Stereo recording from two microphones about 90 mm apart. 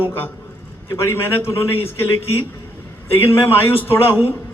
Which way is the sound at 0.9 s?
25° left (ahead or behind).